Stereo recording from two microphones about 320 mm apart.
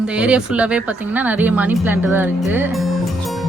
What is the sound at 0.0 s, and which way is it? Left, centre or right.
Speech, centre.